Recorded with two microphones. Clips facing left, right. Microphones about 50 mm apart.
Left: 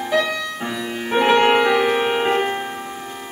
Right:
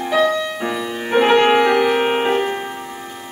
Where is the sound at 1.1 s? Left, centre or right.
Centre.